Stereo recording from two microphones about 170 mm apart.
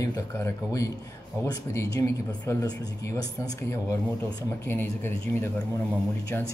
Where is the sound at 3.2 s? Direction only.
20° left (ahead or behind).